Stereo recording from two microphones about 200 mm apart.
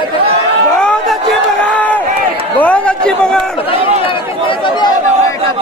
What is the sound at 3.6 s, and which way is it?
Run, 25° left (ahead or behind).